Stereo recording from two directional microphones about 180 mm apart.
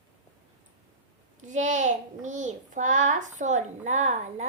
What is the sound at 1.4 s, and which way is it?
A child's voice, 45° right (ahead or behind).